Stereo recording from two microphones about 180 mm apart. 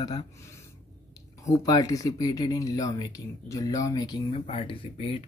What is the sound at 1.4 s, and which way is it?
Speech, 20° left (ahead or behind).